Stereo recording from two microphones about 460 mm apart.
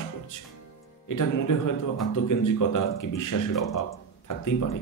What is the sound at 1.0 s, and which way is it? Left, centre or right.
Speech, left.